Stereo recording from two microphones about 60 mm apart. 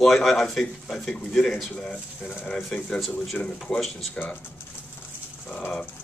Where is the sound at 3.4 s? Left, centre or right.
Left.